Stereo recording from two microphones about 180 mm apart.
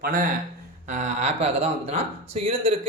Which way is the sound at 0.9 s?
40° right (ahead or behind).